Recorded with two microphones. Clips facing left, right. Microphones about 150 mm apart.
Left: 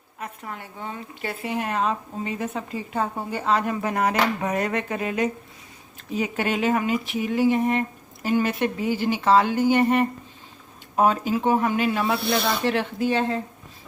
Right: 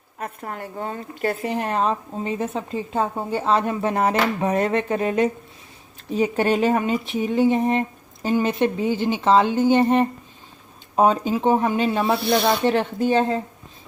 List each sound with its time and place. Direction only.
0.2 s a woman's voice: 45° right (ahead or behind); by 12.2 s 25° right (ahead or behind)
12.2 s speech: centre (ahead or behind)